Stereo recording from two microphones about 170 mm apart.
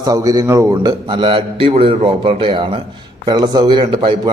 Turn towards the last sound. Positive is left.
turn(degrees=-30)  # may be behind; listen again after turning